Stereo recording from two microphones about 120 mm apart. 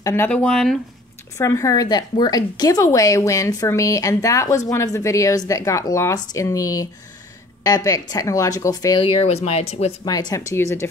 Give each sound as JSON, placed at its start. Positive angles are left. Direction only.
{"t": 0.0, "sound": "a woman's voice", "side_deg": 20}
{"t": 0.4, "sound": "speech", "side_deg": 5}
{"t": 1.4, "sound": "a woman's voice", "side_deg": 25}
{"t": 9.0, "sound": "speech", "side_deg": 60}
{"t": 10.0, "sound": "a woman's voice", "side_deg": 35}